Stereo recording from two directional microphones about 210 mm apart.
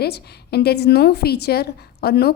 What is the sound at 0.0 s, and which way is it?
A woman's voice, 50° left (ahead or behind).